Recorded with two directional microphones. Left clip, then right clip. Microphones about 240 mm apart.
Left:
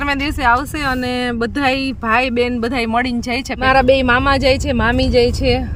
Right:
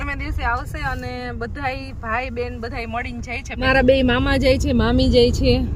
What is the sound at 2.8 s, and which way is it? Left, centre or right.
Speech, left.